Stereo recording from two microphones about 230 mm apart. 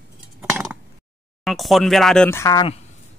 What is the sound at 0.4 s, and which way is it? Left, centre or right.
Chink, centre.